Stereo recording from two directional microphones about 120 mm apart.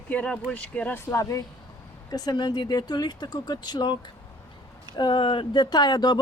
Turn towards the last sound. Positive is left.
turn(degrees=35)  # may be behind; listen again after turning